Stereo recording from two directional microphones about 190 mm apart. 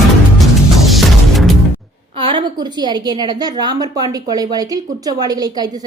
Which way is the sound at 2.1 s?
25° right (ahead or behind).